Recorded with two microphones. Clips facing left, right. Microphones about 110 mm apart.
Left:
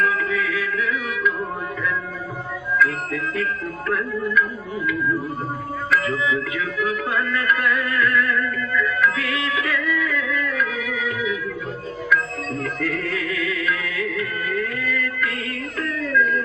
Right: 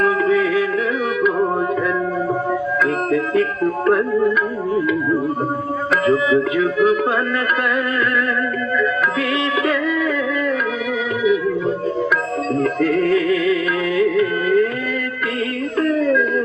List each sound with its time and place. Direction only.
0.0 s music: 25° right (ahead or behind)
2.7 s music: 25° right (ahead or behind)
5.9 s music: 25° right (ahead or behind)
9.6 s music: 25° right (ahead or behind)
12.1 s music: 25° right (ahead or behind)